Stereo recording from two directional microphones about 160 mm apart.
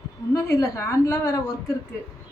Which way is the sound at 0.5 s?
20° left (ahead or behind).